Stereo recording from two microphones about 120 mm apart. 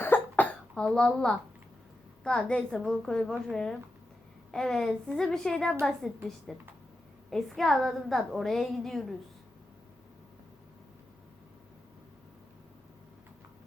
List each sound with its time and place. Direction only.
0.0 s cough: 15° left (ahead or behind)
0.8 s a woman's voice: 5° left (ahead or behind)